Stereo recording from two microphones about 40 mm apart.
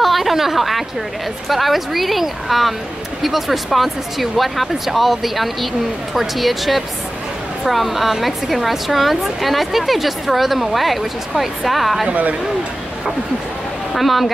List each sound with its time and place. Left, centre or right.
0.0 s a sound: centre
1.5 s a woman's voice: centre
12.1 s speech: right
13.9 s a woman's voice: centre